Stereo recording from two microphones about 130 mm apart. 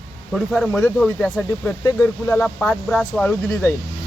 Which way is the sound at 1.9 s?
20° left (ahead or behind).